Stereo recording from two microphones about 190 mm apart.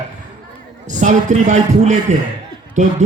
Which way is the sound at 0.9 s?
40° right (ahead or behind).